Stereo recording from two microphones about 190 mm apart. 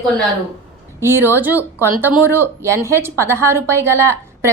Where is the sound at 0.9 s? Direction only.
15° right (ahead or behind).